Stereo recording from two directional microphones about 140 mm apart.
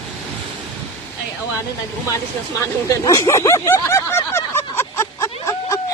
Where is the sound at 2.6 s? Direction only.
25° left (ahead or behind).